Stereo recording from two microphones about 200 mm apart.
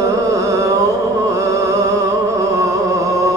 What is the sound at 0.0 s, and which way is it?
Music, 15° right (ahead or behind).